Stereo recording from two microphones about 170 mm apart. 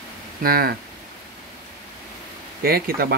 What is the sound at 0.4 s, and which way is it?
Speech, 60° right (ahead or behind).